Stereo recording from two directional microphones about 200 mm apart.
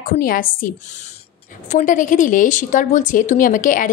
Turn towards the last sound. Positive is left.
turn(degrees=40)  # may be behind; listen again after turning